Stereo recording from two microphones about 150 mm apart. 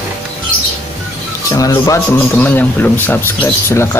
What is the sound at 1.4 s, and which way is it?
A man's voice, 25° left (ahead or behind).